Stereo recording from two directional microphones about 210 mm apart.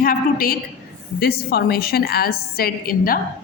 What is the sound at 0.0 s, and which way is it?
A woman's voice, 45° left (ahead or behind).